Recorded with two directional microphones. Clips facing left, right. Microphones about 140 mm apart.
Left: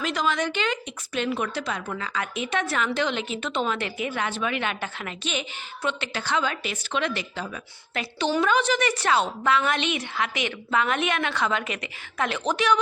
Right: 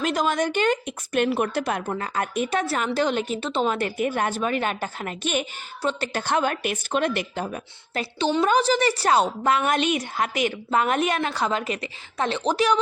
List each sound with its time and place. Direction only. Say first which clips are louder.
0.0 s a woman's voice: right 3 dB; 45° right (ahead or behind)
5.8 s a woman's voice: right 3 dB; 40° right (ahead or behind)
8.2 s a woman's voice: right 2 dB; 30° right (ahead or behind)